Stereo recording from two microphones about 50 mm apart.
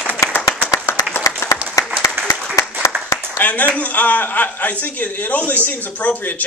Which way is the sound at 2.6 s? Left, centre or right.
Left.